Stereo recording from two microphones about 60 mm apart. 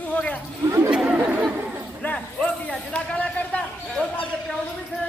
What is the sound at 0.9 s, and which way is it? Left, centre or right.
Chatter, centre.